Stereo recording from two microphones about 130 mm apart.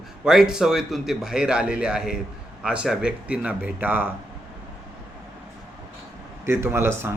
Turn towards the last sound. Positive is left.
turn(degrees=-20)  # may be behind; listen again after turning